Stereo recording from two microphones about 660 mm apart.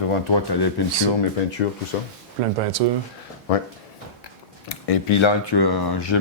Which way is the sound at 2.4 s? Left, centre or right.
Right.